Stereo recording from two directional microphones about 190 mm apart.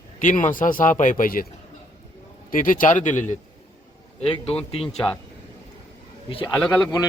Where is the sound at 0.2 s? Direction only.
45° left (ahead or behind).